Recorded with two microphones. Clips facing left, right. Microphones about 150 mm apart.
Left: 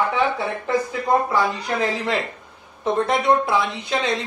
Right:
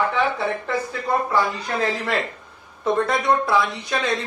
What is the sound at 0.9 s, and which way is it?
Speech, 20° left (ahead or behind).